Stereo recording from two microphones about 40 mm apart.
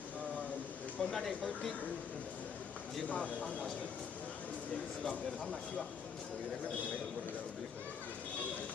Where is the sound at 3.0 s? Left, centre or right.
Left.